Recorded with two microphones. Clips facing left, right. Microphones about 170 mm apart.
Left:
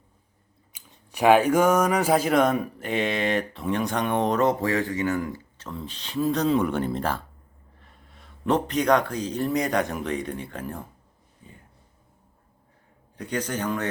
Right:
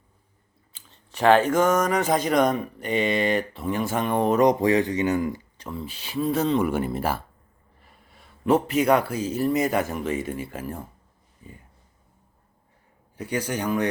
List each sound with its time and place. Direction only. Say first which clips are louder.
0.7 s speech: left 1 dB; 10° left (ahead or behind)
4.4 s a man's voice: right 4 dB; 15° right (ahead or behind)
13.1 s a man's voice: right 1 dB; 10° right (ahead or behind)